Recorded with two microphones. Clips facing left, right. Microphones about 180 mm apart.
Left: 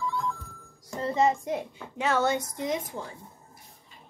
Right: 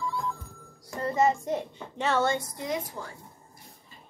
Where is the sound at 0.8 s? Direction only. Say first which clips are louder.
Even; 20° left (ahead or behind).